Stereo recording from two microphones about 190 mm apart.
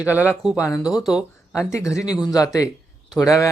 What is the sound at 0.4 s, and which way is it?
Speech, 5° right (ahead or behind).